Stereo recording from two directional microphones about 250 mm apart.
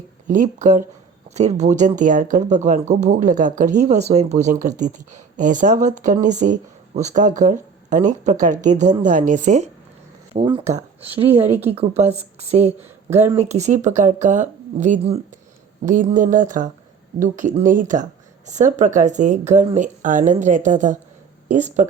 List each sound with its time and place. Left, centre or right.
0.3 s speech: right